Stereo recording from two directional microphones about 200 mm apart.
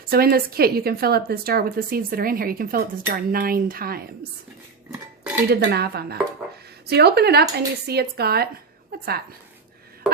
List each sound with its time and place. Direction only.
0.1 s a woman's voice: 50° right (ahead or behind)
4.9 s dishes: 5° right (ahead or behind)
5.5 s a woman's voice: 55° right (ahead or behind)